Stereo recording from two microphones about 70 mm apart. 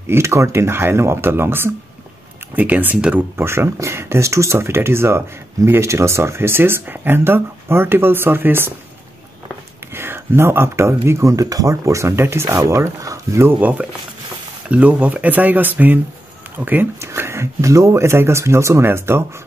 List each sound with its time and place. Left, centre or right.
0.0 s speech: right; by 3.3 s centre
3.3 s speech: right
9.9 s speech: right
11.7 s speech: right
13.6 s speech: right
17.0 s speech: right